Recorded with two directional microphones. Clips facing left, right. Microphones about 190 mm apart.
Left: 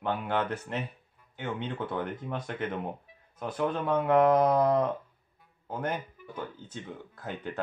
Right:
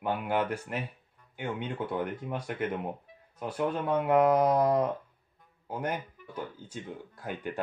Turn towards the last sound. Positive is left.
turn(degrees=-10)  # may be behind; listen again after turning